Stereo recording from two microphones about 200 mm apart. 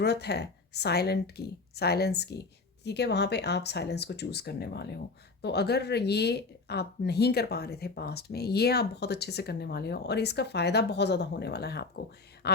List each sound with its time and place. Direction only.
0.0 s speech: 55° left (ahead or behind)